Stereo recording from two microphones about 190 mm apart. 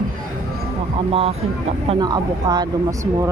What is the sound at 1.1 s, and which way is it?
Speech, 30° right (ahead or behind).